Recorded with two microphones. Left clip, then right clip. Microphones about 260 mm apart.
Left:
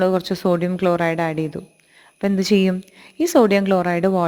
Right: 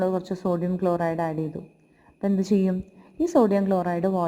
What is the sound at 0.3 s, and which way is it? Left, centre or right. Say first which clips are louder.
Speech: left 7 dB; left.